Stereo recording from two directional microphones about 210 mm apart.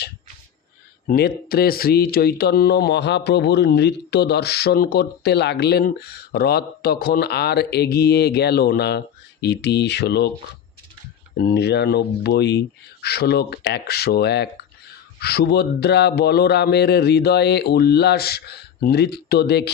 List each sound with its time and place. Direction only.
1.0 s speech: 45° left (ahead or behind)
11.3 s speech: 50° left (ahead or behind)